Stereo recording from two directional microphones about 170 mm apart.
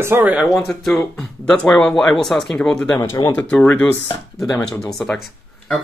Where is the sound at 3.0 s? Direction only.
15° left (ahead or behind).